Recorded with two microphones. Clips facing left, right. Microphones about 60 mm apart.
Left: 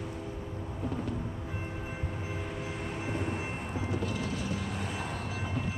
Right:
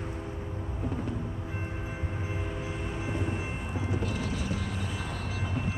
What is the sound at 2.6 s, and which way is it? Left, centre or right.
Train, left.